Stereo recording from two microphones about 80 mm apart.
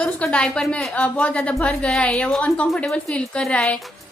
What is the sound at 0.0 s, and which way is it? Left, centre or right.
A woman's voice, centre.